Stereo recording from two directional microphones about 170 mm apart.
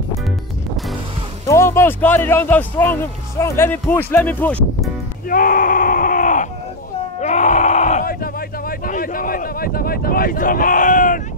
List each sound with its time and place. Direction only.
1.5 s a man's voice: 15° left (ahead or behind)
5.3 s groan: 55° left (ahead or behind)
7.2 s a sound: 45° left (ahead or behind)